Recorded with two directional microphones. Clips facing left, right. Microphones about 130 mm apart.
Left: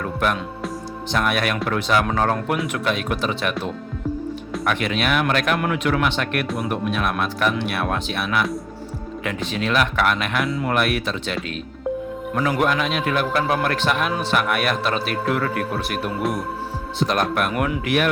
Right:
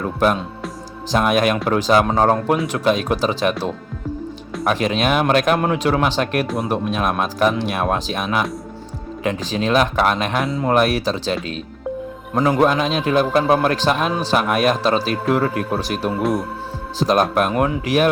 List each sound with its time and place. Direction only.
0.0 s music: 30° right (ahead or behind)
1.1 s a man's voice: 35° right (ahead or behind)
4.6 s a man's voice: 35° right (ahead or behind)
12.4 s a man's voice: 35° right (ahead or behind)